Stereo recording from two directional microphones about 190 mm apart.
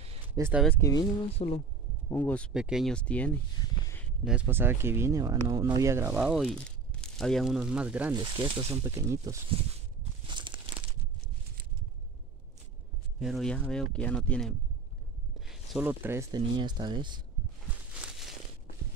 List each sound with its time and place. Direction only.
0.3 s speech: 10° right (ahead or behind)
0.7 s speech: 15° left (ahead or behind)
1.3 s speech: 35° left (ahead or behind)
2.0 s speech: 10° left (ahead or behind)
2.5 s speech: 5° right (ahead or behind)
3.8 s a sound: 10° left (ahead or behind)
4.2 s speech: 5° right (ahead or behind)
8.1 s speech: 25° right (ahead or behind)
8.8 s speech: 15° right (ahead or behind)
10.2 s crumpling: 25° right (ahead or behind)
13.2 s speech: centre (ahead or behind); by 17.2 s 25° right (ahead or behind)